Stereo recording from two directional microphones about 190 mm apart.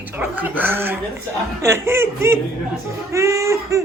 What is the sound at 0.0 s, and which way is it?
Speech, 10° right (ahead or behind).